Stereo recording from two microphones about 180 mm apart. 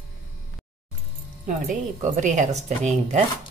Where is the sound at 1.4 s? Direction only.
45° right (ahead or behind).